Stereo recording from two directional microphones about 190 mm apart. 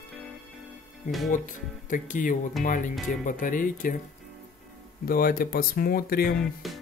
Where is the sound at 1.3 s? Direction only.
45° left (ahead or behind).